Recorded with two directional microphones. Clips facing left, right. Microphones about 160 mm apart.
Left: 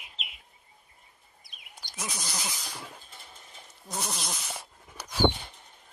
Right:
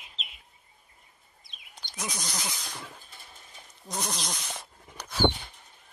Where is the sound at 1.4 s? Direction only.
25° right (ahead or behind).